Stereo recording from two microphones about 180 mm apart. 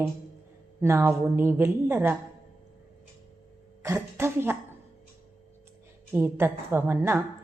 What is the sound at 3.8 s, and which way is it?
Speech, 15° right (ahead or behind).